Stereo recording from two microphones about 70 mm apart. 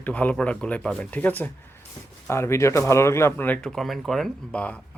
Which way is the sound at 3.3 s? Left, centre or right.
Left.